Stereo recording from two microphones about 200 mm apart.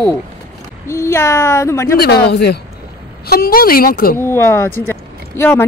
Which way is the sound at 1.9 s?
55° left (ahead or behind).